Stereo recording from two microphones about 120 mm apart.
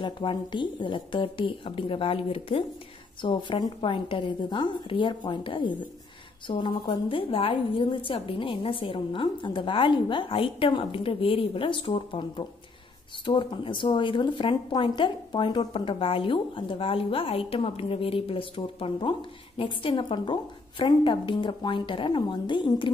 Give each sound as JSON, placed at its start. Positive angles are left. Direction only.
{"t": 0.0, "sound": "a woman's voice", "side_deg": 45}